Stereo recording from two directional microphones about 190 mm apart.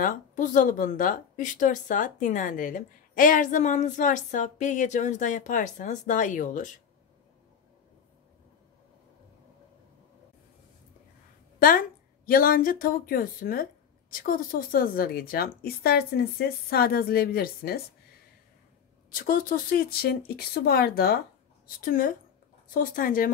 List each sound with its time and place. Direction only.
0.0 s speech: 40° left (ahead or behind)
12.3 s speech: 50° left (ahead or behind)
19.1 s speech: 45° left (ahead or behind)